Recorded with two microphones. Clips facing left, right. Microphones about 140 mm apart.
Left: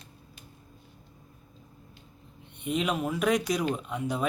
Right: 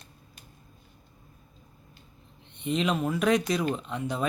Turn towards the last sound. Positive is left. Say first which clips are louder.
# even
turn(degrees=10)  # may be behind; listen again after turning